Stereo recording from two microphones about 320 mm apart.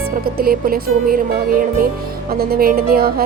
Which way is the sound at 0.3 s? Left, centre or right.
Right.